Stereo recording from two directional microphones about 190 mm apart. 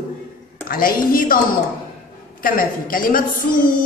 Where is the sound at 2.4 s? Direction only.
45° left (ahead or behind).